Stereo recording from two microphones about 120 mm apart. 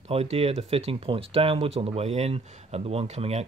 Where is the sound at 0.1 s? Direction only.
55° right (ahead or behind).